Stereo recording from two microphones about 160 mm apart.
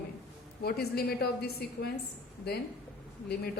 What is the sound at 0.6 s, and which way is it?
A woman's voice, 75° left (ahead or behind).